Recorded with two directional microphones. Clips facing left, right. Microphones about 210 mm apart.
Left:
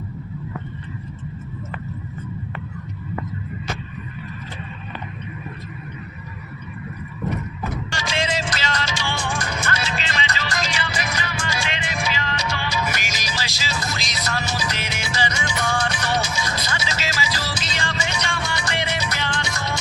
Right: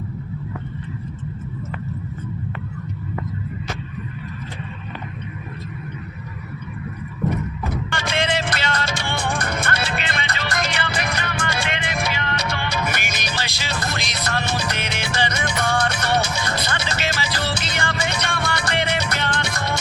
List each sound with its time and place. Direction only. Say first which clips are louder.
7.9 s music: right 3 dB; 55° right (ahead or behind)